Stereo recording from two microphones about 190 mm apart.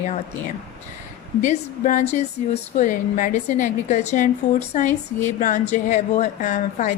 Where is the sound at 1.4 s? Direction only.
40° left (ahead or behind).